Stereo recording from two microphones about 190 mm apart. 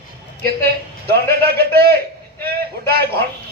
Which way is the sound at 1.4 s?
55° right (ahead or behind).